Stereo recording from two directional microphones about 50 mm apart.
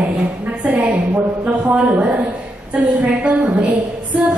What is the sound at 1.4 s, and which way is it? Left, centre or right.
Speech, right.